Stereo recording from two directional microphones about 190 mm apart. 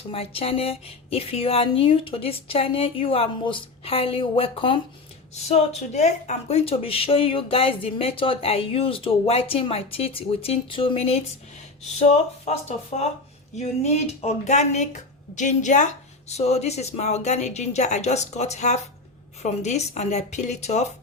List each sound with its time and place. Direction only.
0.1 s speech: 30° left (ahead or behind)
14.2 s speech: 35° left (ahead or behind)